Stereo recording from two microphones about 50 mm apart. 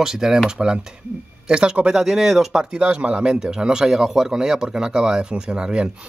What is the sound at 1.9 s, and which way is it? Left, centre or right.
Speech, centre.